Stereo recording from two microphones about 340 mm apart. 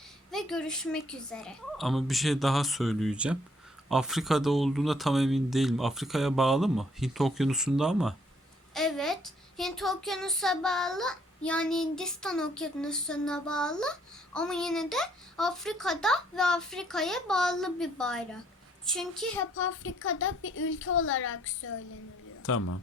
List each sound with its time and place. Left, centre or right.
0.3 s a child's voice: centre
19.5 s a man's voice: left